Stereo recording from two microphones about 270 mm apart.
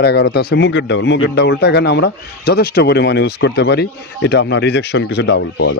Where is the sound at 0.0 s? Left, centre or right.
Left.